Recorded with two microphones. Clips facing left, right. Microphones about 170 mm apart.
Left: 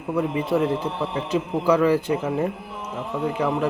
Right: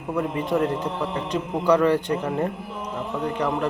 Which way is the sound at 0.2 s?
5° left (ahead or behind).